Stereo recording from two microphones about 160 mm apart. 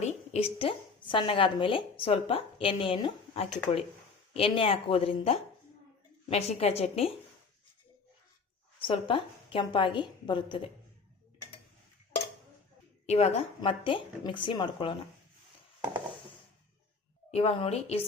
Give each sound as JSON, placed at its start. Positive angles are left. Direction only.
{"t": 0.0, "sound": "a woman's voice", "side_deg": 40}
{"t": 8.8, "sound": "a woman's voice", "side_deg": 30}
{"t": 13.1, "sound": "a woman's voice", "side_deg": 45}
{"t": 13.6, "sound": "a woman's voice", "side_deg": 30}
{"t": 17.3, "sound": "a woman's voice", "side_deg": 40}